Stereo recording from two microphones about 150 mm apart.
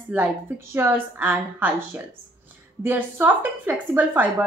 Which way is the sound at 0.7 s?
15° right (ahead or behind).